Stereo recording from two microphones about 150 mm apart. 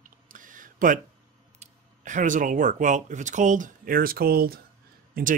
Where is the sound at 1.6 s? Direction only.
55° right (ahead or behind); by 4.6 s 90° right.